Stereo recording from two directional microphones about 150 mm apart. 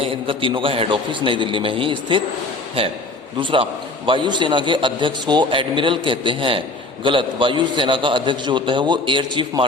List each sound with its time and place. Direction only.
0.0 s a man's voice: 35° right (ahead or behind)
3.4 s a man's voice: 35° right (ahead or behind)